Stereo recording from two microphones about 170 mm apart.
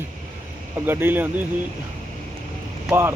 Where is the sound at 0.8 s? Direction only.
10° right (ahead or behind).